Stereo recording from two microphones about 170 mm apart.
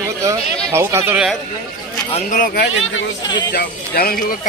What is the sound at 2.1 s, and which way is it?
Speech, 50° left (ahead or behind).